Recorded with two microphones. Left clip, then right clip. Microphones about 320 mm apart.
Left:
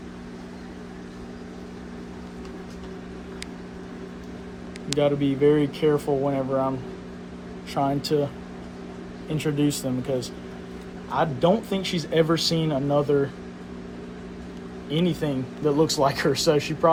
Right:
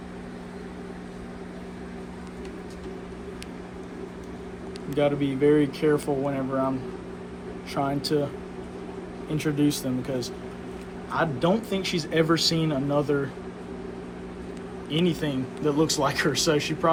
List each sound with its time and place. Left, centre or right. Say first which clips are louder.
4.9 s speech: left 2 dB; left
9.3 s speech: even; left
14.8 s speech: left 1 dB; left